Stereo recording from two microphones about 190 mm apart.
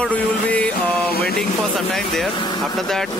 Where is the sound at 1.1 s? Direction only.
55° left (ahead or behind).